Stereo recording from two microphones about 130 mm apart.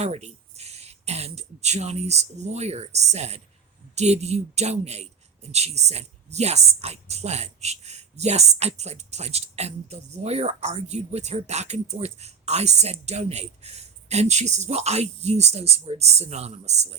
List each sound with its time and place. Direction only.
0.0 s speech: 55° right (ahead or behind)